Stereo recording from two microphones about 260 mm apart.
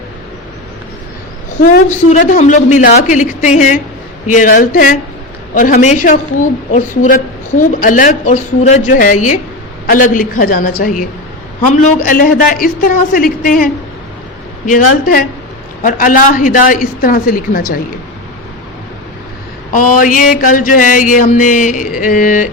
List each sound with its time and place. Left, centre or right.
1.9 s a woman's voice: left
4.3 s mantra: left
6.7 s a woman's voice: left
9.8 s mantra: left
14.7 s mantra: left
19.7 s mantra: left